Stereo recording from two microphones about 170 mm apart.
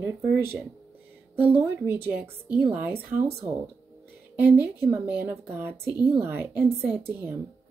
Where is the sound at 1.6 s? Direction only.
15° right (ahead or behind).